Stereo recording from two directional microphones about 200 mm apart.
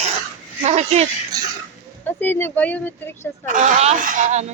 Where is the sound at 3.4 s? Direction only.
40° right (ahead or behind).